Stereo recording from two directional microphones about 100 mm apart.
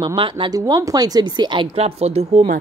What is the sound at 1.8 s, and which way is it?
Speech, 90° right.